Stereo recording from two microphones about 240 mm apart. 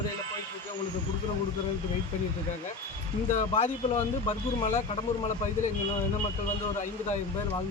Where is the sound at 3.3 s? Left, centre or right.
Left.